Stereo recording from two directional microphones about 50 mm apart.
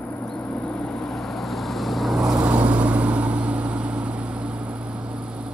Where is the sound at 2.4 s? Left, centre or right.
Right.